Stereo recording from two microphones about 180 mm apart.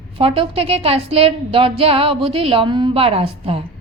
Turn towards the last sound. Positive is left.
turn(degrees=-35)  # may be behind; listen again after turning